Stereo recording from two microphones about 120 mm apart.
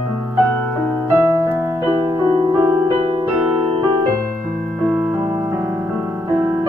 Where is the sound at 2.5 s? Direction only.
25° right (ahead or behind).